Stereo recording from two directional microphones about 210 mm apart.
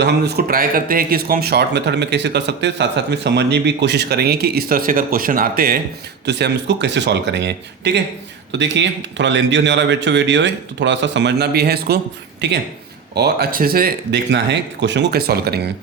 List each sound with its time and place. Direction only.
0.0 s speech: 50° right (ahead or behind)
6.2 s speech: 55° right (ahead or behind)
13.1 s speech: 50° right (ahead or behind)